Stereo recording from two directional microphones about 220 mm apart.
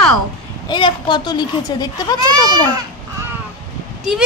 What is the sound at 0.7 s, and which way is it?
Speech, 20° left (ahead or behind).